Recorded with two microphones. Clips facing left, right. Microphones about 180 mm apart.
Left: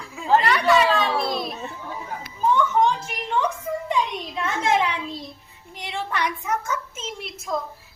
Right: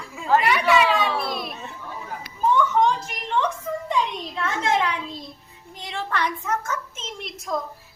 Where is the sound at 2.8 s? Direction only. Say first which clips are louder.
Even; 5° left (ahead or behind).